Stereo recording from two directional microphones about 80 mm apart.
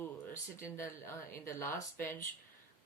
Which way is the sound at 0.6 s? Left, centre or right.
Left.